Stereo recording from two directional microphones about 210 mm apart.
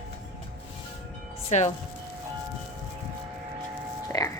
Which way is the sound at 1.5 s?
30° left (ahead or behind).